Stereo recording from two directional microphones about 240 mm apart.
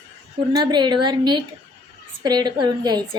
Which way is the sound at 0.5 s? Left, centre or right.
Centre.